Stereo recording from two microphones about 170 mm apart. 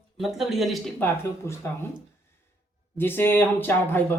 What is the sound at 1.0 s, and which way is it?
Speech, 15° left (ahead or behind).